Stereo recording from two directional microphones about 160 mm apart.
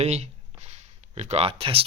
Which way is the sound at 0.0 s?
45° right (ahead or behind).